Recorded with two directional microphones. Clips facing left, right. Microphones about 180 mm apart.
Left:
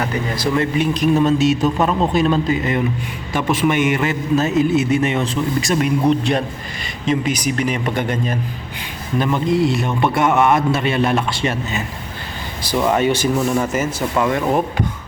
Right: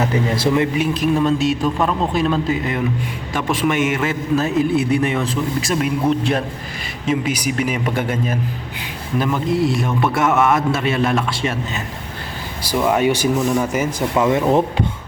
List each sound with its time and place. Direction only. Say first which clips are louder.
0.0 s speech: right 3 dB; 25° right (ahead or behind)
0.6 s a man's voice: left 1 dB; 5° right (ahead or behind)
13.3 s a man's voice: even; centre (ahead or behind)
13.7 s speech: right 1 dB; 20° right (ahead or behind)